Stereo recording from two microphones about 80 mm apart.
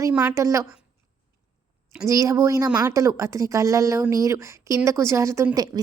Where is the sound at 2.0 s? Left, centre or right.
Right.